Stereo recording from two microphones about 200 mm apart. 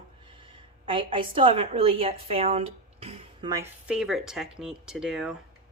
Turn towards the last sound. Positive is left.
turn(degrees=-5)  # may be behind; listen again after turning